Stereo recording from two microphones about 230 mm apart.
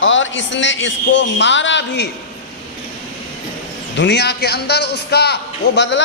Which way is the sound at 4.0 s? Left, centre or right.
Left.